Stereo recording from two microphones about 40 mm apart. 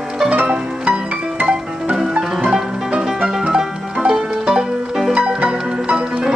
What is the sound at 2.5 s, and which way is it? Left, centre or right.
Music, centre.